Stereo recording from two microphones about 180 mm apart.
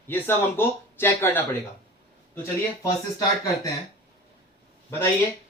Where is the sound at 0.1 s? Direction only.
10° left (ahead or behind).